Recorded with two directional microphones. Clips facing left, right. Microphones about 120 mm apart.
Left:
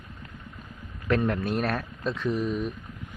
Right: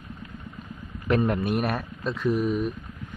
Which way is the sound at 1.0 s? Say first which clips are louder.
Right 2 dB; 20° right (ahead or behind).